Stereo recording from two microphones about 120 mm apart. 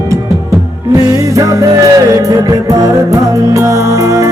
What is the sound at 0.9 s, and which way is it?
Music, 30° right (ahead or behind).